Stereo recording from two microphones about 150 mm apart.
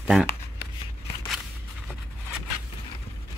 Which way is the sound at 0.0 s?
5° right (ahead or behind).